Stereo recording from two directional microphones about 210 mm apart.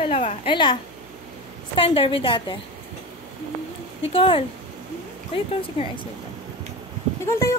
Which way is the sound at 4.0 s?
25° left (ahead or behind).